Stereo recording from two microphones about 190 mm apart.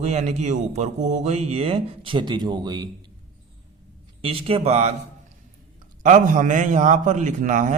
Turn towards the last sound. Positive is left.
turn(degrees=-45)  # may be behind; listen again after turning